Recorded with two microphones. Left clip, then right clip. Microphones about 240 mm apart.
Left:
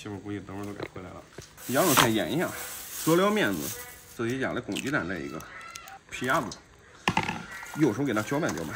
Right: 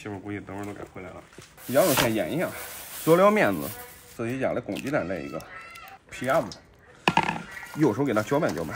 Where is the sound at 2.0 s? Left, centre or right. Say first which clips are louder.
Left 1 dB; centre.